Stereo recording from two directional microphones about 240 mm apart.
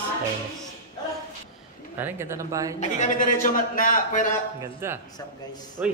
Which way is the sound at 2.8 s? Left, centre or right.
Left.